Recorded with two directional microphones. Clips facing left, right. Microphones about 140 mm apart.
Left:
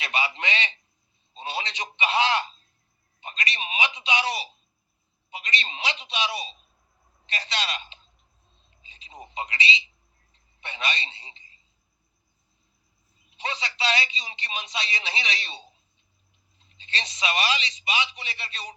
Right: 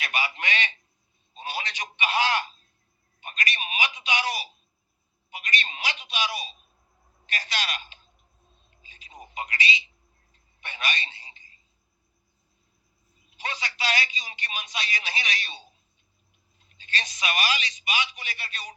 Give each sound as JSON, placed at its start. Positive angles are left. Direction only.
{"t": 0.0, "sound": "a sound", "side_deg": 25}
{"t": 13.3, "sound": "telephone", "side_deg": 25}
{"t": 16.6, "sound": "a man's voice", "side_deg": 25}